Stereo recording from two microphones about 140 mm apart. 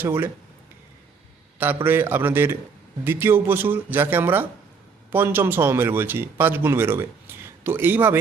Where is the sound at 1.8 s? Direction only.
15° right (ahead or behind).